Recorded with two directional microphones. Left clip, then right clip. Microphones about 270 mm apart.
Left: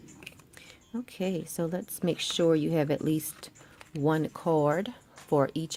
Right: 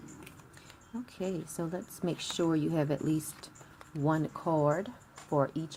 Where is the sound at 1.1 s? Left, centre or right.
Left.